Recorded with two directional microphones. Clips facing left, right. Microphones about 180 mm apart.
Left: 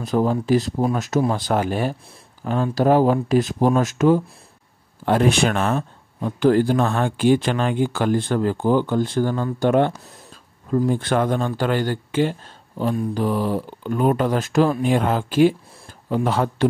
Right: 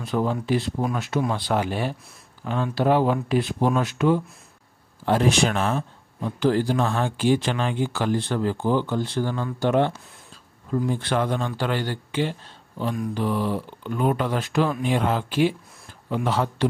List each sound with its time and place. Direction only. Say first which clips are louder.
0.0 s speech: left 4 dB; 40° left (ahead or behind)
5.0 s speech: left 3 dB; 55° left (ahead or behind)